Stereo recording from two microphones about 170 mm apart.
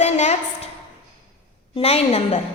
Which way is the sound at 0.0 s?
40° left (ahead or behind).